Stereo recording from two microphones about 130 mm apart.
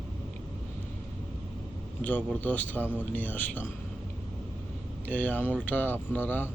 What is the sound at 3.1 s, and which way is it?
Speech, 15° left (ahead or behind).